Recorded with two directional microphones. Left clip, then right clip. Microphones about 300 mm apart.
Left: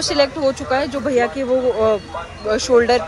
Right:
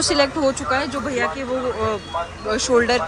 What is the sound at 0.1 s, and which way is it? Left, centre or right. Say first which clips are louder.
Speech: left 3 dB; centre.